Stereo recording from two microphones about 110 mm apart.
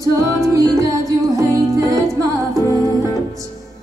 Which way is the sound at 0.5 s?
30° right (ahead or behind).